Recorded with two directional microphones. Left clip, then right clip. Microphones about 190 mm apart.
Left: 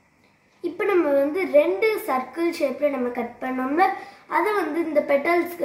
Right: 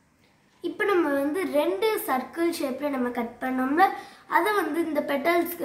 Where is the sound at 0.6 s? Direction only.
15° right (ahead or behind).